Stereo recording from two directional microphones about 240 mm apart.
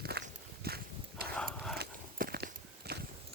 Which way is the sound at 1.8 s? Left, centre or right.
Right.